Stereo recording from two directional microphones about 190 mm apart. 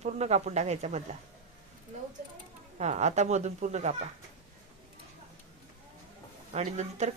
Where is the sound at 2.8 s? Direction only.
35° right (ahead or behind).